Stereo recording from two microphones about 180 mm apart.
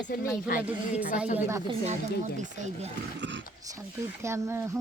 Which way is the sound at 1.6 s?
35° right (ahead or behind).